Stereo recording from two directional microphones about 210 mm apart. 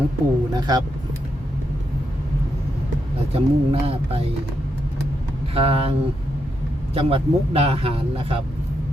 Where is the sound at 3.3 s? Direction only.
30° right (ahead or behind).